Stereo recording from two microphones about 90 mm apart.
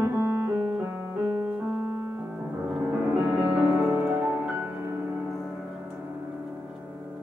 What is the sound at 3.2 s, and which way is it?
Music, 15° right (ahead or behind).